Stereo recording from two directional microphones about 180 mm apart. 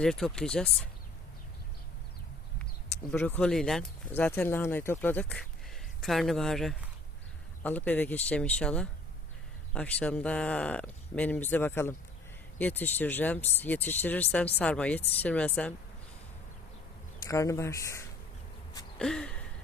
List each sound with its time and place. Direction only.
0.0 s speech: 5° left (ahead or behind)
3.1 s speech: 10° left (ahead or behind)
17.2 s speech: 15° left (ahead or behind)
18.9 s a sound: 5° left (ahead or behind)